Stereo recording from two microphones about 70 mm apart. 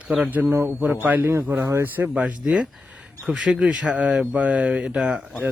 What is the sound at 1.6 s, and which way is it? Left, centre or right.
Speech, right.